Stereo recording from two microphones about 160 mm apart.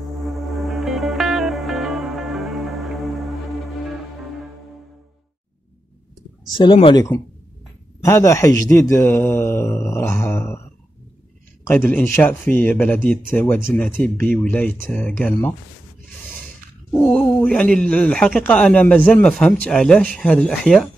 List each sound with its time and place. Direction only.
0.0 s music: centre (ahead or behind)
6.4 s speech: 30° left (ahead or behind)
8.0 s speech: 20° left (ahead or behind)
11.6 s speech: 10° left (ahead or behind)
16.9 s speech: 10° left (ahead or behind)